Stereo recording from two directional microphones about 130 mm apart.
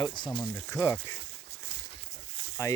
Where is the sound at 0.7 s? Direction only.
20° left (ahead or behind).